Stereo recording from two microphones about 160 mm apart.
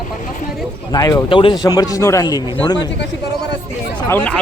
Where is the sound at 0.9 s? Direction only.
20° left (ahead or behind).